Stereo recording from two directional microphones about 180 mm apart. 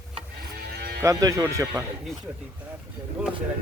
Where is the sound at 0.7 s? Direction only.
60° right (ahead or behind).